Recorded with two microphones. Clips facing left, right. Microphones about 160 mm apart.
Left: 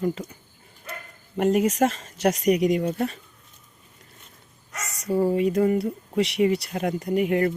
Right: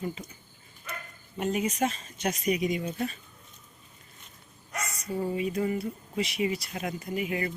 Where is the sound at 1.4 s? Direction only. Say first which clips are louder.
Left 8 dB; 75° left (ahead or behind).